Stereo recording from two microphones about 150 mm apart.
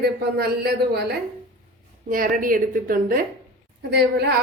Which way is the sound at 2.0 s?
70° right (ahead or behind).